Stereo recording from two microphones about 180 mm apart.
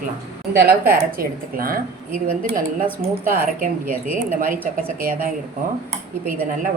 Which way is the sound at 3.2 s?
50° right (ahead or behind).